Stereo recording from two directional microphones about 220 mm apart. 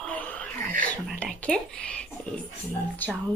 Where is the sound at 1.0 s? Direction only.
5° left (ahead or behind).